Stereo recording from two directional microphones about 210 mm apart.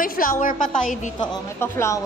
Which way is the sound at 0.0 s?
40° left (ahead or behind).